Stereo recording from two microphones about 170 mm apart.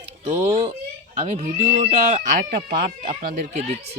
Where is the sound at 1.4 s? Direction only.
45° right (ahead or behind).